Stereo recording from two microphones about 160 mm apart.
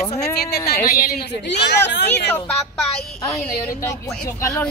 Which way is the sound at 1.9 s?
90° left.